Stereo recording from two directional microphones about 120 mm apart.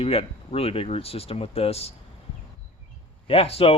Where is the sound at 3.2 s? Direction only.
55° left (ahead or behind).